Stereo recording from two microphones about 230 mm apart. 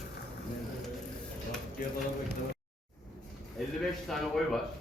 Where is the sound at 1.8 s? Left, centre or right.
Left.